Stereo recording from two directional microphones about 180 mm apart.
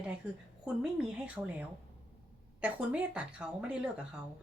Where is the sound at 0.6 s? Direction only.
5° right (ahead or behind).